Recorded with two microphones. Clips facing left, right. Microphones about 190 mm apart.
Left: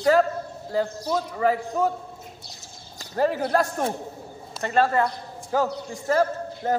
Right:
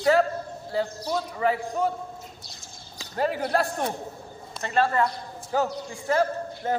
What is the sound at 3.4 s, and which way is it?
A man's voice, 40° left (ahead or behind).